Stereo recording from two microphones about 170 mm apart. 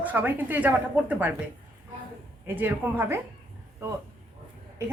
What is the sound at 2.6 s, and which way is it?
Speech, 10° right (ahead or behind).